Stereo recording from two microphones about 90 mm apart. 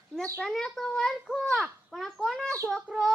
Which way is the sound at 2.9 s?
15° right (ahead or behind).